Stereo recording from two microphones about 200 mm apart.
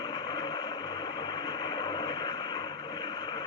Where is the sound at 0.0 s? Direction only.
20° left (ahead or behind).